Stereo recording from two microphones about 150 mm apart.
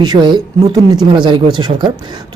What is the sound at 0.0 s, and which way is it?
A man's voice, 25° right (ahead or behind).